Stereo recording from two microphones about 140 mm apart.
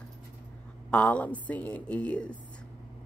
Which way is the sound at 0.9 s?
10° left (ahead or behind).